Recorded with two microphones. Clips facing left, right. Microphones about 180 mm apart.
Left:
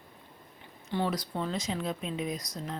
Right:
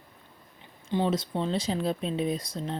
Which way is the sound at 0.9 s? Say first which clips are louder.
Right 4 dB; 20° right (ahead or behind).